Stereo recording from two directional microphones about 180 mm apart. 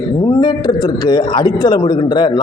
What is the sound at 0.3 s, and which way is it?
A man's voice, 20° left (ahead or behind).